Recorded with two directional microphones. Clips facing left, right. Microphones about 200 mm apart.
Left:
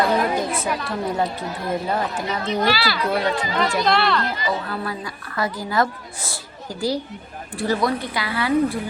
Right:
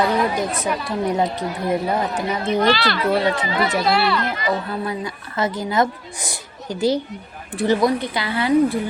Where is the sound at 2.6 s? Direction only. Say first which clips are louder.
Right 3 dB; 5° left (ahead or behind).